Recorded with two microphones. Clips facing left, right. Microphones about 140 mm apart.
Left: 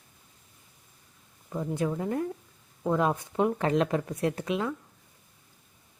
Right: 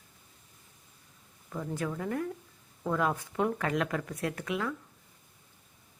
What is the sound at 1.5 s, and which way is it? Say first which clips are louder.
Speech: left 5 dB; 20° left (ahead or behind).